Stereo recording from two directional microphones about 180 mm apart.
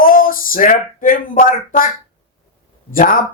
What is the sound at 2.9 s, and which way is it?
Speech, 50° left (ahead or behind).